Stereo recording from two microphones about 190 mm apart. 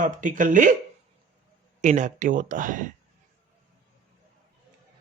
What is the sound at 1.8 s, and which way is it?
Speech, 40° right (ahead or behind).